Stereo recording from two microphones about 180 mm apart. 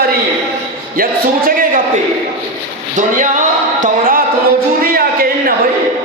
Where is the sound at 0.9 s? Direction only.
50° right (ahead or behind).